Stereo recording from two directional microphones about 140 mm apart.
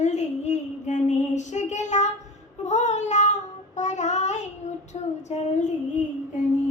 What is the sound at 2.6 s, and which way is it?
Child singing, 55° left (ahead or behind).